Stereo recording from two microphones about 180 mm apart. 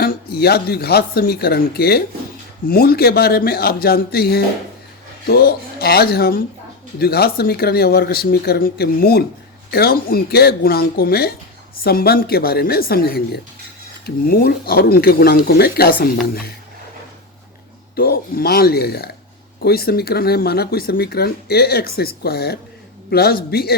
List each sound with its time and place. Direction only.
0.0 s speech: 60° left (ahead or behind)
17.9 s speech: 55° left (ahead or behind)